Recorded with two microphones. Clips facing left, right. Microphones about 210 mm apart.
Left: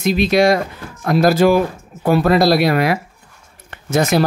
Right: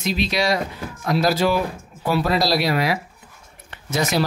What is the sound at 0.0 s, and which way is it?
Speech, 50° left (ahead or behind).